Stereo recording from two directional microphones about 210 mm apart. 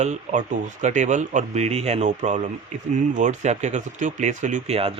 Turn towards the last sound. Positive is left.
turn(degrees=-30)  # may be behind; listen again after turning